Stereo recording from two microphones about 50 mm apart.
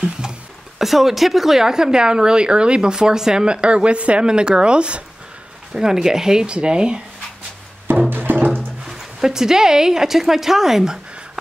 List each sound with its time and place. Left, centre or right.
0.7 s a woman's voice: centre
8.1 s music: right
8.8 s a woman's voice: centre